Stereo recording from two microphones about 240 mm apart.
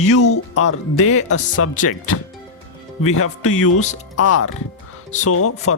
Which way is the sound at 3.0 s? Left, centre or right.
Left.